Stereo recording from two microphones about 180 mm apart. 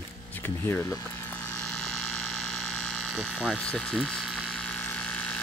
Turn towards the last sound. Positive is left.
turn(degrees=5)  # may be behind; listen again after turning